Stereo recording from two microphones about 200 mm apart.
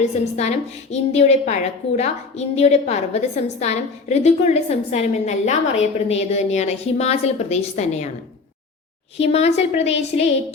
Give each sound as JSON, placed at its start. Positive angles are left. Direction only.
{"t": 0.0, "sound": "a woman's voice", "side_deg": 35}
{"t": 9.1, "sound": "a woman's voice", "side_deg": 30}